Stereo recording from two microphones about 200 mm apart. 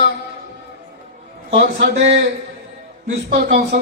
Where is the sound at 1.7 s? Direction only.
35° right (ahead or behind).